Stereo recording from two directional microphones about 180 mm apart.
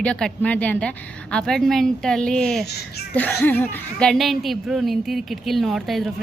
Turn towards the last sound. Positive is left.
turn(degrees=0)  # may be behind; listen again after turning